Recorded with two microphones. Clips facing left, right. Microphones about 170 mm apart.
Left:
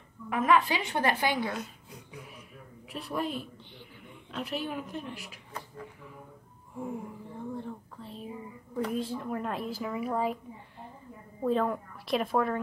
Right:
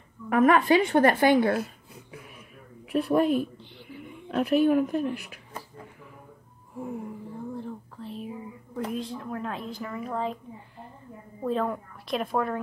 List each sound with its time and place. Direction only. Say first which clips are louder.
0.3 s a woman's voice: right 6 dB; 55° right (ahead or behind)
2.9 s speech: right 11 dB; 55° right (ahead or behind)
7.5 s whispering: right 2 dB; centre (ahead or behind)
8.9 s speech: even; 5° left (ahead or behind)